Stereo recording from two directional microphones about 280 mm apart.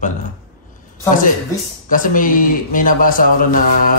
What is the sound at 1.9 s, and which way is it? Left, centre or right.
Speech, left.